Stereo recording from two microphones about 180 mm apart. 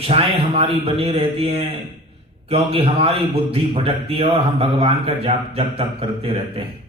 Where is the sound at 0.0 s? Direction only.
30° right (ahead or behind).